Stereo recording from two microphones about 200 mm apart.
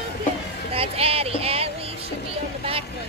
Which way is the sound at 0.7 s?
30° right (ahead or behind).